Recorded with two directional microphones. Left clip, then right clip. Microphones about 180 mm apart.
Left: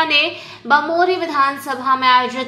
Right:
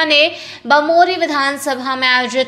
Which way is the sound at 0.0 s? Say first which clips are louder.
Right 3 dB; 40° right (ahead or behind).